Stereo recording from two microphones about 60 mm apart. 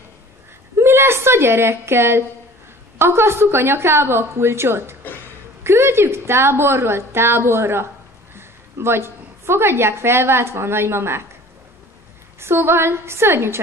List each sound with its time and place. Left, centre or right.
0.7 s a sound: right
3.0 s a woman's voice: right
12.4 s a woman's voice: right